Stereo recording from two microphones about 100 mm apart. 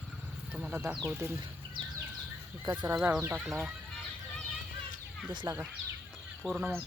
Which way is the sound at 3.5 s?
Centre (ahead or behind).